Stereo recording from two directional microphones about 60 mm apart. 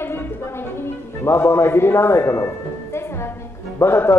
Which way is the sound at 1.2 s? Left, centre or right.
Left.